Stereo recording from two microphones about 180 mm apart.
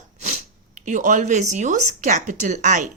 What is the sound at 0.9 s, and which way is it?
A woman's voice, 45° right (ahead or behind).